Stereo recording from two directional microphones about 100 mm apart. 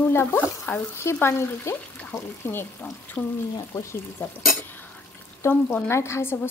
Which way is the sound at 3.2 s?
10° left (ahead or behind).